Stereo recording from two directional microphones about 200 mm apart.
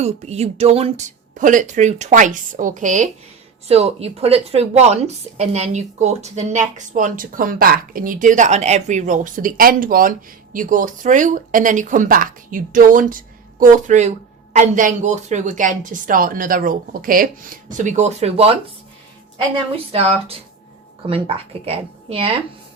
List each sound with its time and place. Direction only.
0.0 s a woman's voice: 35° right (ahead or behind)
19.7 s a woman's voice: 30° right (ahead or behind)